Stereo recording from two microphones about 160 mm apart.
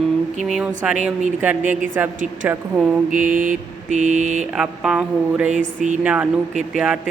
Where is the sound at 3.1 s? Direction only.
55° right (ahead or behind).